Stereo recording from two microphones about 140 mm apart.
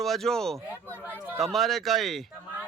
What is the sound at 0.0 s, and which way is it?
Speech, centre (ahead or behind).